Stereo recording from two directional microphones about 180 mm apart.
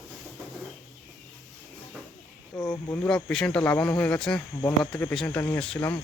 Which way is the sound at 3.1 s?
5° left (ahead or behind).